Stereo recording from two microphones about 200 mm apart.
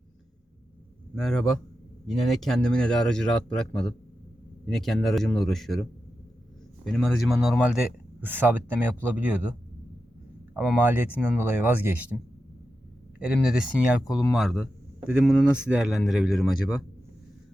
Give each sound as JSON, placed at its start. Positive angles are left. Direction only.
{"t": 1.1, "sound": "speech", "side_deg": 5}
{"t": 6.8, "sound": "speech", "side_deg": 0}
{"t": 10.5, "sound": "speech", "side_deg": -10}